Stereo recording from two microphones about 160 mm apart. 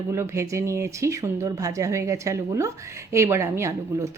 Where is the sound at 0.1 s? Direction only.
20° right (ahead or behind).